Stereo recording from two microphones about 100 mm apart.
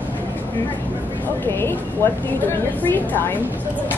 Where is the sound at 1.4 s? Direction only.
25° left (ahead or behind).